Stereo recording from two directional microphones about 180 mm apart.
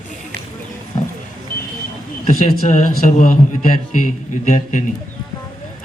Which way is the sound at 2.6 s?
40° left (ahead or behind).